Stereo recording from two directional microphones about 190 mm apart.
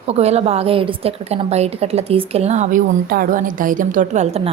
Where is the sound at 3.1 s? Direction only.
50° right (ahead or behind).